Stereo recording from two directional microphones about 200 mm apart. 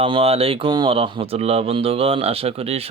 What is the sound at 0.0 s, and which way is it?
Speech, 30° right (ahead or behind).